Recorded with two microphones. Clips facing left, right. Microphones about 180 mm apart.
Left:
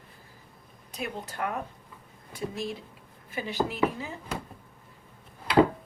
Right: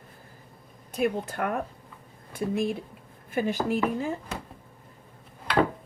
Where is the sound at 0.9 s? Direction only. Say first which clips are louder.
Right 9 dB; 50° right (ahead or behind).